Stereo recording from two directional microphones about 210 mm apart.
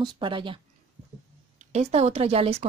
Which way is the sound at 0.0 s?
20° right (ahead or behind).